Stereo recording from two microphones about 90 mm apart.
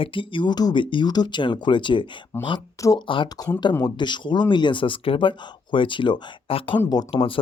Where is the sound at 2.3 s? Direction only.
25° left (ahead or behind).